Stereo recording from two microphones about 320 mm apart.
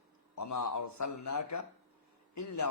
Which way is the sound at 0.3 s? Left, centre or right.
Left.